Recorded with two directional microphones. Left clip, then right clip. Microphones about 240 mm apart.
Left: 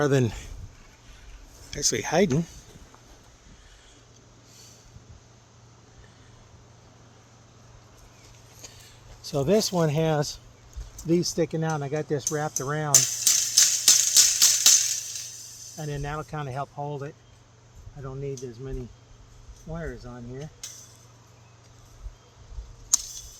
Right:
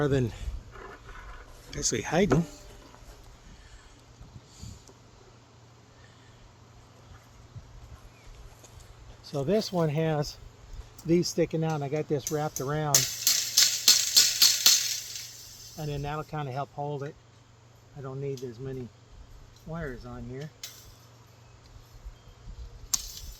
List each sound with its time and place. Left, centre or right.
0.0 s speech: left
1.7 s speech: left
9.4 s speech: left
11.0 s speech: centre
12.6 s music: centre
15.8 s speech: centre
18.0 s a sound: centre